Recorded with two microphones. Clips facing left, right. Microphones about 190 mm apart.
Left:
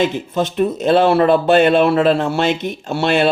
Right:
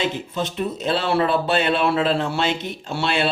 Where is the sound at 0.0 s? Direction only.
50° left (ahead or behind).